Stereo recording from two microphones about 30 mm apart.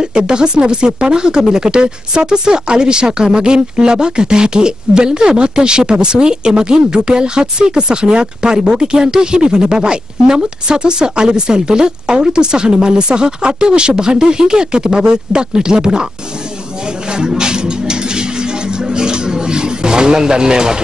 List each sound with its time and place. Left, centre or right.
0.0 s speech: right
17.4 s music: right